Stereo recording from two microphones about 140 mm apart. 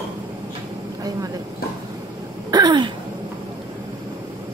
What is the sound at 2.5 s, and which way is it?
Throat clearing, 30° right (ahead or behind).